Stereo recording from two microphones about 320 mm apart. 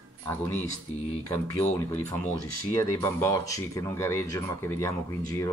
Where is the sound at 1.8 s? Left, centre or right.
Centre.